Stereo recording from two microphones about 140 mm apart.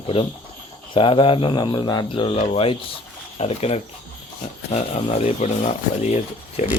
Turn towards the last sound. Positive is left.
turn(degrees=45)  # may be behind; listen again after turning